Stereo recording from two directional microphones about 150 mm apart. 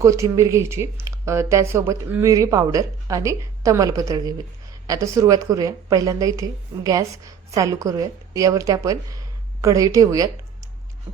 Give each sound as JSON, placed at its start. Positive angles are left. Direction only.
{"t": 0.0, "sound": "a woman's voice", "side_deg": -20}